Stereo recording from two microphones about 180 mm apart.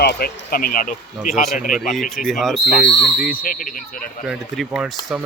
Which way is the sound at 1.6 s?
45° left (ahead or behind).